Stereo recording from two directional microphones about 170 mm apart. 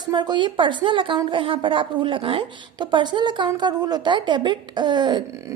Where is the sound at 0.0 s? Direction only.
25° right (ahead or behind).